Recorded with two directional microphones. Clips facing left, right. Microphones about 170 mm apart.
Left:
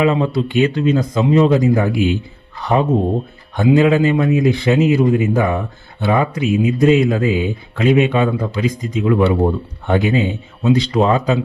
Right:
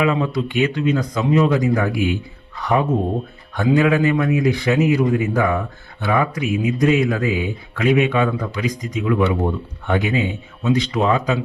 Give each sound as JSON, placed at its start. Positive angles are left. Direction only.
{"t": 0.0, "sound": "a man's voice", "side_deg": 30}